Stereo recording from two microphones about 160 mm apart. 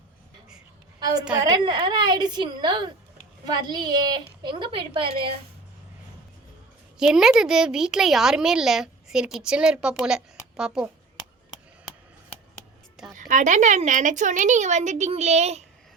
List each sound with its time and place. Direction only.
0.9 s a sound: 25° right (ahead or behind)
1.4 s a woman's voice: 25° right (ahead or behind)
7.0 s a woman's voice: 5° right (ahead or behind)
13.1 s a woman's voice: 50° right (ahead or behind)